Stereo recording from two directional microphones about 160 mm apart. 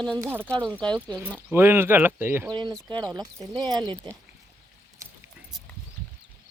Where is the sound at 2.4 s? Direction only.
30° right (ahead or behind).